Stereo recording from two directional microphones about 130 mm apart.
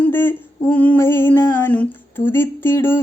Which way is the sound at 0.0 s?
15° left (ahead or behind).